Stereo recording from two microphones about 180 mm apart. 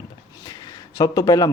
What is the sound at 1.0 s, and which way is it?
Speech, 20° left (ahead or behind).